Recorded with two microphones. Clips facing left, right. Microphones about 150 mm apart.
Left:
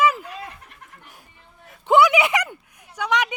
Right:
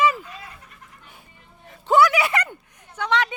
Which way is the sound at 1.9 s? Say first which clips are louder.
Left 2 dB; 20° left (ahead or behind).